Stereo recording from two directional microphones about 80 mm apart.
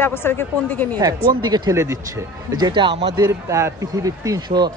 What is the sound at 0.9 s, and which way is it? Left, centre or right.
Speech, right.